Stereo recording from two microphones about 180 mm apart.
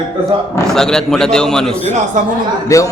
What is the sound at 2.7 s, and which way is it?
Speech, 15° left (ahead or behind).